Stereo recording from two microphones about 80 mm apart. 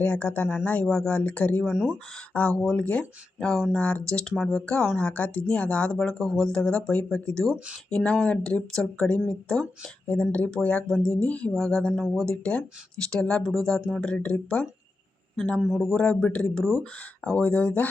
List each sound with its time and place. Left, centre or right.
0.0 s speech: centre
1.7 s speech: centre
2.5 s speech: centre
7.5 s speech: centre
7.9 s speech: centre
10.1 s speech: centre
15.8 s speech: centre